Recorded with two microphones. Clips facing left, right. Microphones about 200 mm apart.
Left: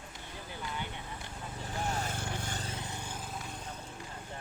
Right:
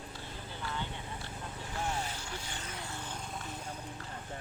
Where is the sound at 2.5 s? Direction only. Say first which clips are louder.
Left 3 dB; 30° left (ahead or behind).